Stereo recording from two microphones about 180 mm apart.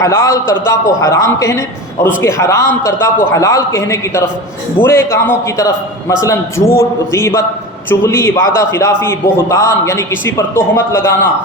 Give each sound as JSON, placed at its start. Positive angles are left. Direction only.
{"t": 0.0, "sound": "a man's voice", "side_deg": 15}